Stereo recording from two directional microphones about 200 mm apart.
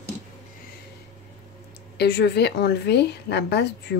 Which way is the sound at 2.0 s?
55° left (ahead or behind).